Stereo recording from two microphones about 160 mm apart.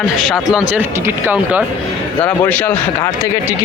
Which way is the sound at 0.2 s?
Centre (ahead or behind).